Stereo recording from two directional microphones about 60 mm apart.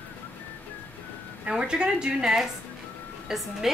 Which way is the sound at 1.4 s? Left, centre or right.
Centre.